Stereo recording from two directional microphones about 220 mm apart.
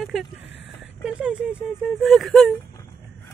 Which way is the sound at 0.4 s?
55° left (ahead or behind).